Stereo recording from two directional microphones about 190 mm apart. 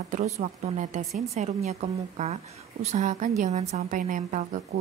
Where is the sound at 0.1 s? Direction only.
40° right (ahead or behind).